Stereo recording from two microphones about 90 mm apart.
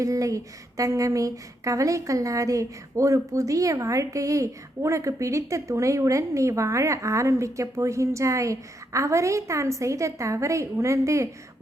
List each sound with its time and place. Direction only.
0.0 s speech: 40° right (ahead or behind)